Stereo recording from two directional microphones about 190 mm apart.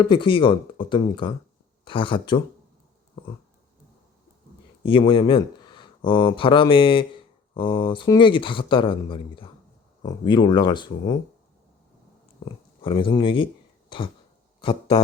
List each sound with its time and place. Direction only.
0.0 s speech: 25° left (ahead or behind)
4.8 s speech: 25° left (ahead or behind)
12.8 s speech: 25° left (ahead or behind)